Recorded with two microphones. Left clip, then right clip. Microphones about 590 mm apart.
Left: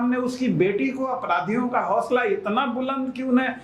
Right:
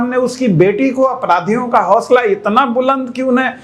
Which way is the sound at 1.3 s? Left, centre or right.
Right.